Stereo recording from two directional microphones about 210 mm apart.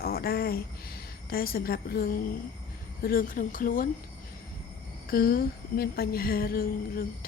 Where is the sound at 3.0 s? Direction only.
40° left (ahead or behind).